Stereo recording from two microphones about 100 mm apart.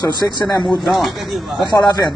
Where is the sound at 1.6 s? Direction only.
45° left (ahead or behind).